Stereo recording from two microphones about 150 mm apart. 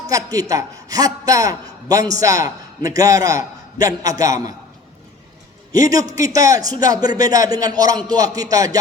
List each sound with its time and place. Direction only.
0.1 s a man's voice: 25° right (ahead or behind)
5.7 s a man's voice: 20° right (ahead or behind)